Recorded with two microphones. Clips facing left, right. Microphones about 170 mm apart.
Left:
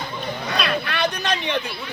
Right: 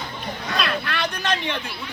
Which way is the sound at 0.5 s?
Centre (ahead or behind).